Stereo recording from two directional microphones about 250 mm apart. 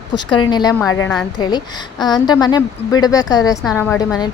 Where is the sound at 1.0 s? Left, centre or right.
Centre.